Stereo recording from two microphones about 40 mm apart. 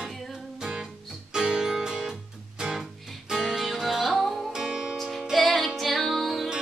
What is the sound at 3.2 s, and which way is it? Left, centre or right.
Music, centre.